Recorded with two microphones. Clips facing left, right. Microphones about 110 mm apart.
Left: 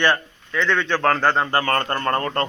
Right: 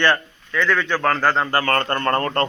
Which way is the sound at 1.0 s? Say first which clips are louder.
Left 1 dB; 5° left (ahead or behind).